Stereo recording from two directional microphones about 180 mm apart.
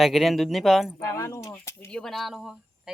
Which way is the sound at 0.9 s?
15° left (ahead or behind).